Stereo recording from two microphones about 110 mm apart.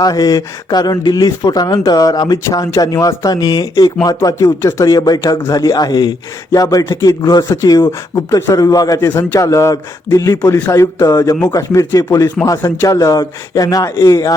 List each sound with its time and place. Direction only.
0.0 s speech: 35° left (ahead or behind)
9.0 s speech: 20° left (ahead or behind)